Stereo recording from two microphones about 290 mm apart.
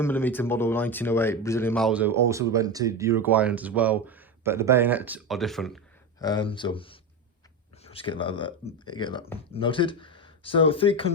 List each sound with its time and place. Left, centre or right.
0.0 s speech: centre
6.1 s speech: centre